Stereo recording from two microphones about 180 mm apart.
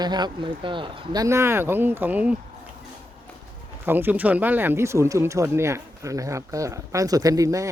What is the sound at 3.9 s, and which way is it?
Speech, 10° right (ahead or behind).